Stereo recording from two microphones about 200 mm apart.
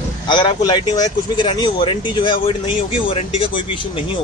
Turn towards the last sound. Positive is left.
turn(degrees=25)  # may be behind; listen again after turning